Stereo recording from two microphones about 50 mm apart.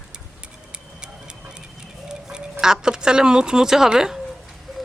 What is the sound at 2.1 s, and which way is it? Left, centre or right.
Speech, centre.